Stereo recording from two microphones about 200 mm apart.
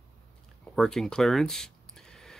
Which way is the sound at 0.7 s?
Centre (ahead or behind).